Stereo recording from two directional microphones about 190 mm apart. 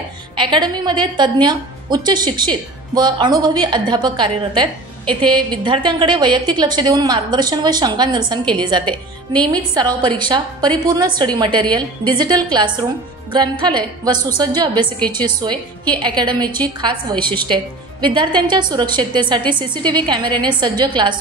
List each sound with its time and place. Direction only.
0.4 s a woman's voice: 25° right (ahead or behind)